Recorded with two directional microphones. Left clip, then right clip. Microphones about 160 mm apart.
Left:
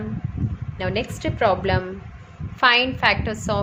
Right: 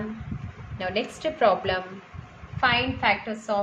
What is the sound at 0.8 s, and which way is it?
A woman's voice, 40° left (ahead or behind).